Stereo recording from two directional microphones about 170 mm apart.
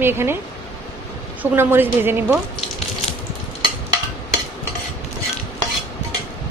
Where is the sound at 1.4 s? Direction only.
10° right (ahead or behind).